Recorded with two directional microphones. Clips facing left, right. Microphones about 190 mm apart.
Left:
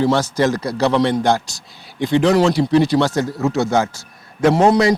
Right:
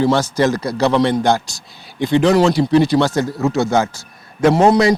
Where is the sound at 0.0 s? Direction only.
10° right (ahead or behind).